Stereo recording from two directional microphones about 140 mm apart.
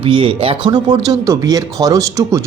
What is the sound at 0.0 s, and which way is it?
Speech, 40° right (ahead or behind).